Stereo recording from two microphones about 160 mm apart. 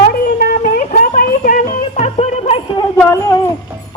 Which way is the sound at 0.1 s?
60° left (ahead or behind).